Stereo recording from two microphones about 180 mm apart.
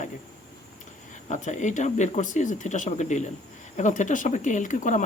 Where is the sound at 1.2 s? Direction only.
40° left (ahead or behind).